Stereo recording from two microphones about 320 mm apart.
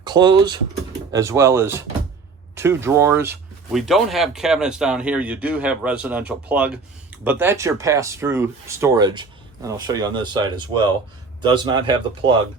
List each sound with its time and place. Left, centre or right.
0.0 s speech: centre